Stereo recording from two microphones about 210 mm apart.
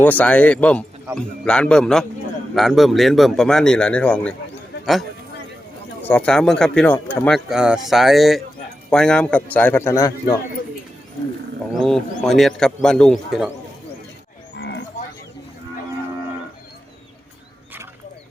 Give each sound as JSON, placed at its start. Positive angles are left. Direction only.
{"t": 0.0, "sound": "a man's voice", "side_deg": 5}
{"t": 6.0, "sound": "a man's voice", "side_deg": 10}
{"t": 11.7, "sound": "speech", "side_deg": 0}
{"t": 14.5, "sound": "livestock", "side_deg": 55}